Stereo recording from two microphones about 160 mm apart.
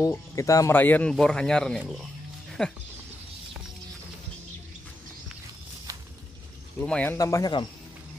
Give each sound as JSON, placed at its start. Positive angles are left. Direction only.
{"t": 0.0, "sound": "speech", "side_deg": 20}
{"t": 6.8, "sound": "speech", "side_deg": 10}
{"t": 7.2, "sound": "speech", "side_deg": 20}